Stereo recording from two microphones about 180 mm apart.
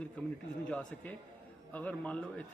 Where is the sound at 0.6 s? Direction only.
10° left (ahead or behind).